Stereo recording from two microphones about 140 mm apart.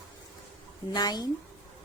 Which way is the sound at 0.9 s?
30° left (ahead or behind).